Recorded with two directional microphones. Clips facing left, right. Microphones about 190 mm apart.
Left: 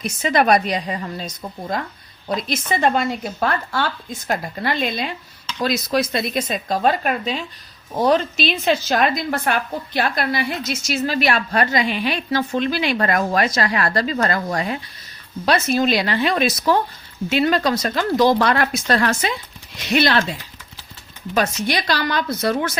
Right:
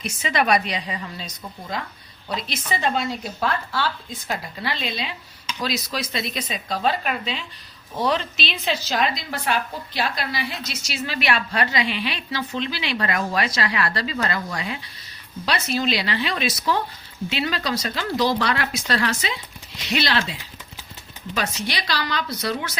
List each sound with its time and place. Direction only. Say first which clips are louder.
0.0 s a woman's voice: left 5 dB; 45° left (ahead or behind)
21.3 s a woman's voice: left 7 dB; 45° left (ahead or behind)